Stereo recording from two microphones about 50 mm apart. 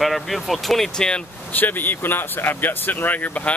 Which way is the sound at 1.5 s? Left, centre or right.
Left.